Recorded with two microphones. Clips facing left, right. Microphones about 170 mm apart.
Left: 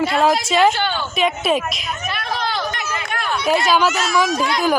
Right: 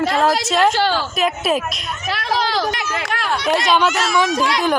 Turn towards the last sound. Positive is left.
turn(degrees=-80)